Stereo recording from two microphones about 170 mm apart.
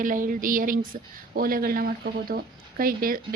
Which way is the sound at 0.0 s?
50° right (ahead or behind).